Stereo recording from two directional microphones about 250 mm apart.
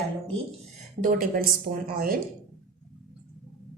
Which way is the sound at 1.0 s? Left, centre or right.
Right.